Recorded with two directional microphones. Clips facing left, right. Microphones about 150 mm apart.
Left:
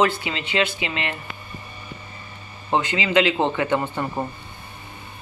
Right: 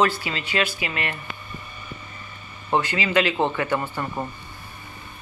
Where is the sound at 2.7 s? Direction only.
20° left (ahead or behind).